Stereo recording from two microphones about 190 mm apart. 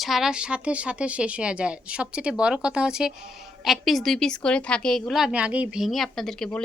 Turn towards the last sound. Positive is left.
turn(degrees=5)  # may be behind; listen again after turning